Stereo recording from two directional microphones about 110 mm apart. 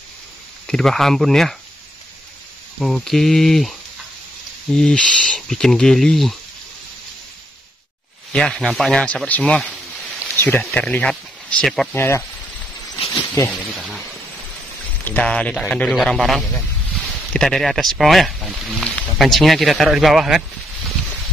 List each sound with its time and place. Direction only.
0.7 s speech: 5° left (ahead or behind)
2.8 s speech: centre (ahead or behind)
4.7 s speech: 5° left (ahead or behind)
8.3 s speech: 5° left (ahead or behind)
11.9 s speech: 20° left (ahead or behind)
13.5 s speech: centre (ahead or behind)
15.0 s speech: 10° left (ahead or behind)